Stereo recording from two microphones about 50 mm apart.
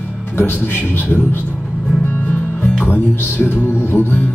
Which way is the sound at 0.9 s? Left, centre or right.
Left.